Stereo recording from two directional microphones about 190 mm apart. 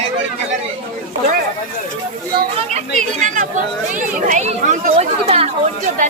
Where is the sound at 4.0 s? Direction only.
40° right (ahead or behind).